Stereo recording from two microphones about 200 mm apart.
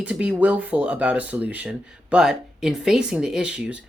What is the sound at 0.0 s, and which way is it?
Speech, 5° right (ahead or behind).